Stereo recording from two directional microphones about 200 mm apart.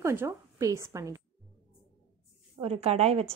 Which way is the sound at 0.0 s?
15° right (ahead or behind).